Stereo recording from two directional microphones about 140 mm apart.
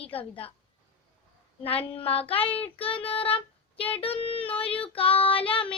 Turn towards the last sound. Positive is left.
turn(degrees=40)  # may be behind; listen again after turning